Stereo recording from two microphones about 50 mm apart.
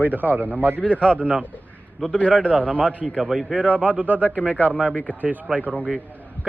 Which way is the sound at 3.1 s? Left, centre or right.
Centre.